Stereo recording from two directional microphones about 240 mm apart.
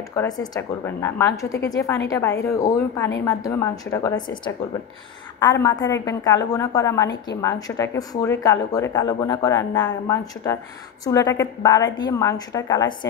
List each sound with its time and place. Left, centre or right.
0.1 s a woman's voice: centre